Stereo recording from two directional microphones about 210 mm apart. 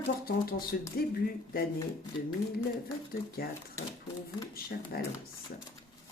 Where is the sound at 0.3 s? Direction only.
45° left (ahead or behind).